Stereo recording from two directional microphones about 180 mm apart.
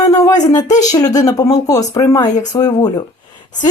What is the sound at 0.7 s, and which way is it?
Speech, 40° left (ahead or behind).